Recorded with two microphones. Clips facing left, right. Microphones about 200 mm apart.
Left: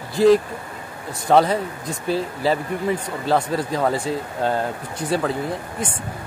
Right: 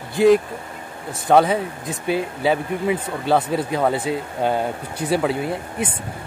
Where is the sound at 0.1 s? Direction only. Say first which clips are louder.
Even; centre (ahead or behind).